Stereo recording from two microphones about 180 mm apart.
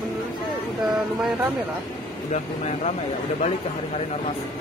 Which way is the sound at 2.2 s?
40° left (ahead or behind).